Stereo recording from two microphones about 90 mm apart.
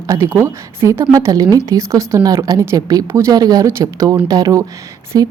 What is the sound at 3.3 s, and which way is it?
A woman's voice, 45° right (ahead or behind).